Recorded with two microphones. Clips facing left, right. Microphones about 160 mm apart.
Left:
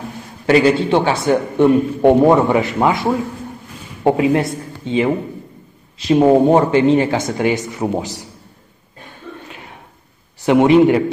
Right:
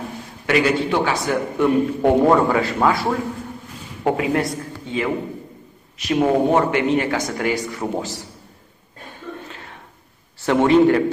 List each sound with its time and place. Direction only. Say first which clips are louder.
0.5 s a man's voice: left 6 dB; 30° left (ahead or behind)
10.4 s a man's voice: left 3 dB; 15° left (ahead or behind)